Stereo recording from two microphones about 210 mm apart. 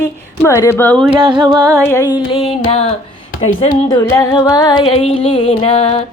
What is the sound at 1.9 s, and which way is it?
Music, 15° left (ahead or behind).